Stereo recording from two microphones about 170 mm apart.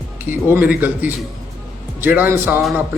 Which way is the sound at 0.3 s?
10° right (ahead or behind).